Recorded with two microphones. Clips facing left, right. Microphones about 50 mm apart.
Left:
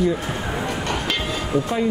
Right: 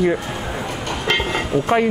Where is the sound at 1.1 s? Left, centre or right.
Right.